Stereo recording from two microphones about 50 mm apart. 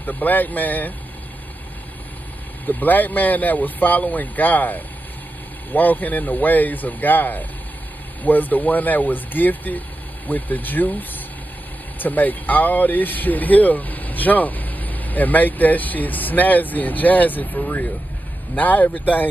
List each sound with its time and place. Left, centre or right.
0.0 s speech: left
2.6 s speech: left